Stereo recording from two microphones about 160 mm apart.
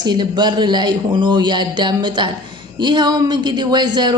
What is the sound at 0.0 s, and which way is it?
A woman's voice, 25° right (ahead or behind).